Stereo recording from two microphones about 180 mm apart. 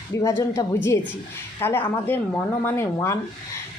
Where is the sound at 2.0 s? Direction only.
10° left (ahead or behind).